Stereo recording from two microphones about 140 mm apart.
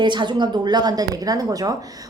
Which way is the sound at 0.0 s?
35° right (ahead or behind).